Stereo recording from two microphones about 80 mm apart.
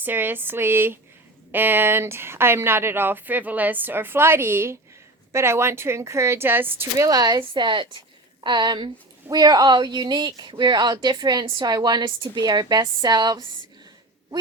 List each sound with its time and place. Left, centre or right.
0.0 s speech: right
7.0 s a woman's voice: right
8.4 s a woman's voice: right
11.6 s a woman's voice: right